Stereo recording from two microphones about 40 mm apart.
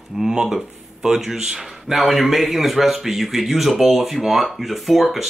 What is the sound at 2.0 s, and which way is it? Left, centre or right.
Speech, centre.